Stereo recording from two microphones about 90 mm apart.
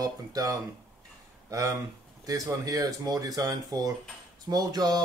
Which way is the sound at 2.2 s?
40° right (ahead or behind).